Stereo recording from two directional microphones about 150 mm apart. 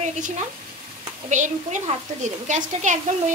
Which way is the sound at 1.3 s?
55° right (ahead or behind).